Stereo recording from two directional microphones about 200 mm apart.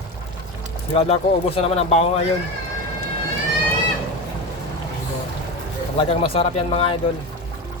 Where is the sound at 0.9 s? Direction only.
30° left (ahead or behind).